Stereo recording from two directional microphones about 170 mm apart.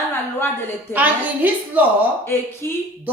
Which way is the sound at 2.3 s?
15° left (ahead or behind).